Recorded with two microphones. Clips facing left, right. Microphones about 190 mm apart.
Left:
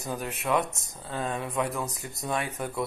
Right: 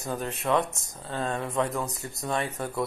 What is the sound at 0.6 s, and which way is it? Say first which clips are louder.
Speech: even; 20° left (ahead or behind).